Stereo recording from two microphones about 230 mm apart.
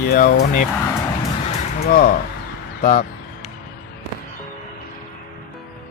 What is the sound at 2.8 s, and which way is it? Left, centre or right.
Basketball bounce, left.